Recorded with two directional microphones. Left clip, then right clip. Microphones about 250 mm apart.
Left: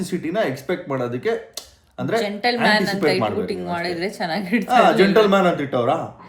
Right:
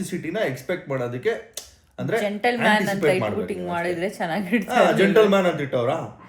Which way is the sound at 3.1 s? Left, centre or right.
Left.